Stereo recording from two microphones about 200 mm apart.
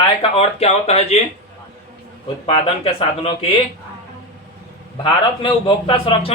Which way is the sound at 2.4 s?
30° left (ahead or behind).